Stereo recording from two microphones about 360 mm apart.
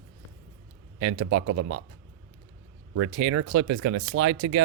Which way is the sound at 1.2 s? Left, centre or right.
Right.